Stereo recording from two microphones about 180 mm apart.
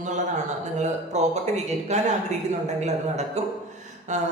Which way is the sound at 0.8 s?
40° right (ahead or behind).